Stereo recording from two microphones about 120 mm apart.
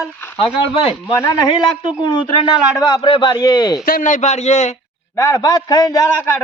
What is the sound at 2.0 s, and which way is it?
Speech, 40° left (ahead or behind).